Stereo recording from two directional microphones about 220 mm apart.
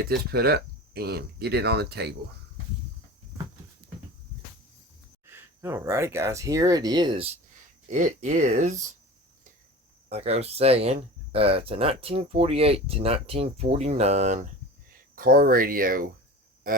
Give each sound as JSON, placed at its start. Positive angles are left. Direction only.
{"t": 0.0, "sound": "speech", "side_deg": -45}
{"t": 5.2, "sound": "speech", "side_deg": -10}
{"t": 7.9, "sound": "speech", "side_deg": -35}
{"t": 10.1, "sound": "speech", "side_deg": -30}
{"t": 16.7, "sound": "a sound", "side_deg": -40}